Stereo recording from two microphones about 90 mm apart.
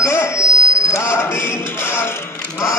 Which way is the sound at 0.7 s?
35° left (ahead or behind).